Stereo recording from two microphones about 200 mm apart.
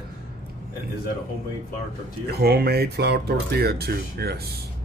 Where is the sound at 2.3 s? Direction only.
50° right (ahead or behind).